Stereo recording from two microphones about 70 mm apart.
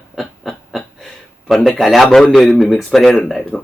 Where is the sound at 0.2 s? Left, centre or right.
Centre.